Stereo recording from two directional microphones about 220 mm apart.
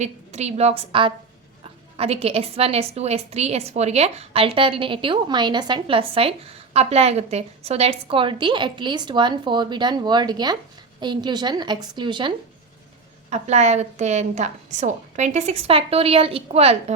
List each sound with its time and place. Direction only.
0.0 s a woman's voice: 30° right (ahead or behind)
13.3 s a woman's voice: 30° right (ahead or behind)